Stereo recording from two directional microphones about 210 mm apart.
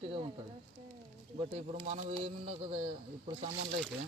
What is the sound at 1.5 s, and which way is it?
Speech, 35° right (ahead or behind).